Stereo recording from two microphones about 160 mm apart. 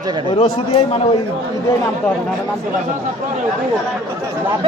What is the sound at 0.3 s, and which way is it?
Speech, 35° left (ahead or behind).